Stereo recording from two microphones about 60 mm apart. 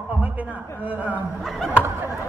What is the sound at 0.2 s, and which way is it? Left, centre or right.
Speech, right.